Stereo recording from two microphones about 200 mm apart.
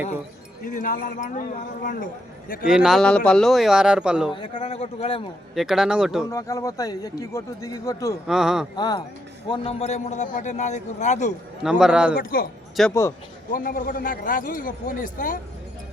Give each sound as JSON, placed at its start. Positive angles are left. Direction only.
{"t": 0.6, "sound": "a man's voice", "side_deg": 40}
{"t": 2.6, "sound": "speech", "side_deg": -5}
{"t": 4.3, "sound": "a man's voice", "side_deg": 25}
{"t": 5.5, "sound": "speech", "side_deg": 0}
{"t": 6.3, "sound": "speech", "side_deg": 15}
{"t": 8.3, "sound": "speech", "side_deg": 0}
{"t": 8.7, "sound": "a man's voice", "side_deg": 20}
{"t": 11.6, "sound": "speech", "side_deg": -5}
{"t": 12.1, "sound": "a man's voice", "side_deg": 45}
{"t": 12.9, "sound": "speech", "side_deg": 15}
{"t": 13.5, "sound": "a man's voice", "side_deg": 45}